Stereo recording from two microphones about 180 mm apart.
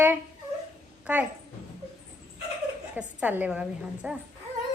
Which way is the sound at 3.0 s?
10° right (ahead or behind).